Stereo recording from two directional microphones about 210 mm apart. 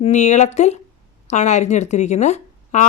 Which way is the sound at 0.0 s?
35° left (ahead or behind).